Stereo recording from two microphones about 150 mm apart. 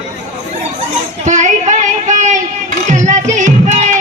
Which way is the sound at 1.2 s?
55° right (ahead or behind).